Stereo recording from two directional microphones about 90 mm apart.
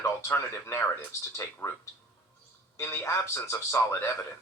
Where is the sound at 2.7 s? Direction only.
30° left (ahead or behind).